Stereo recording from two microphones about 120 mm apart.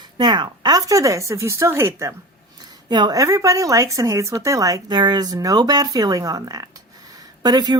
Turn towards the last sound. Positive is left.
turn(degrees=-35)  # may be behind; listen again after turning